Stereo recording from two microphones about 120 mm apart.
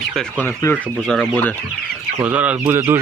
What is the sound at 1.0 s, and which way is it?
Speech, 5° left (ahead or behind).